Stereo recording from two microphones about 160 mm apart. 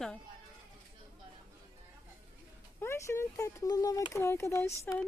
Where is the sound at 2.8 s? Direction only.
15° left (ahead or behind).